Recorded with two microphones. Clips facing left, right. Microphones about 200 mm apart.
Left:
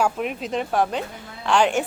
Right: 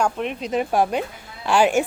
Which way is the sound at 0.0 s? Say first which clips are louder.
Even; 5° left (ahead or behind).